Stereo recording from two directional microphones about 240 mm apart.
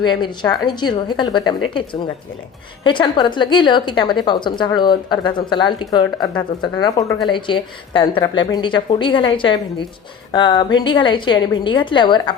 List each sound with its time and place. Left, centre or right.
0.0 s a woman's voice: centre